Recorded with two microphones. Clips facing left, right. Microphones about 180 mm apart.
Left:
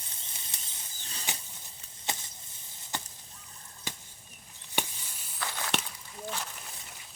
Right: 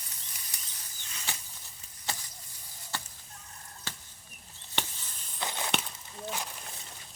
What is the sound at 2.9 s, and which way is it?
Fowl, 20° left (ahead or behind).